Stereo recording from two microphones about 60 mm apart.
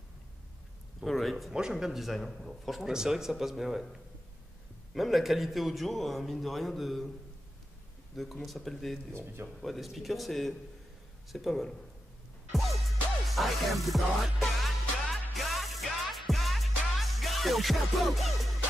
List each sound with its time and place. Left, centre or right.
1.0 s a man's voice: centre
4.9 s a man's voice: centre
8.2 s a man's voice: centre
9.1 s speech: right
9.6 s a man's voice: centre
12.5 s music: centre